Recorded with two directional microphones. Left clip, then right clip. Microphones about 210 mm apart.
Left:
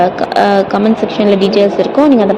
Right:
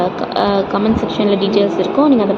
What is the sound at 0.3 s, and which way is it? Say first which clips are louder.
Speech: left 5 dB; 65° left (ahead or behind).